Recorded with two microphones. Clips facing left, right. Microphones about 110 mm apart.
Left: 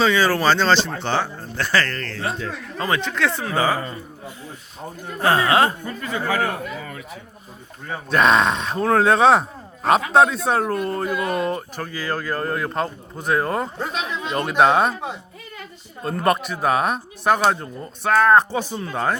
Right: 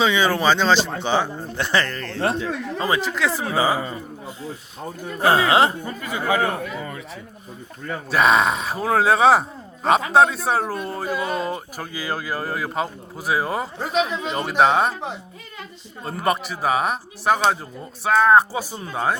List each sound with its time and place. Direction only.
0.0 s speech: 15° right (ahead or behind)
2.9 s speech: 5° right (ahead or behind)
5.2 s speech: 15° right (ahead or behind)
8.1 s speech: centre (ahead or behind)
16.0 s speech: centre (ahead or behind)